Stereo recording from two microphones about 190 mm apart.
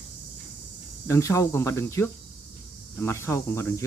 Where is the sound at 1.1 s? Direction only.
15° left (ahead or behind).